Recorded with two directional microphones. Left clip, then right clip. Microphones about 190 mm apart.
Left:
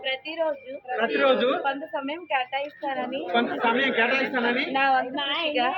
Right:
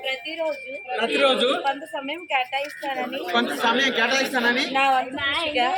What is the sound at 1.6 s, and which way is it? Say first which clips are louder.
A woman's voice: right 2 dB; 25° right (ahead or behind).